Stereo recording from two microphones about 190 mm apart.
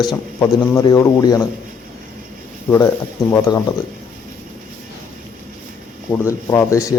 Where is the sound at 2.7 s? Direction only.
15° left (ahead or behind).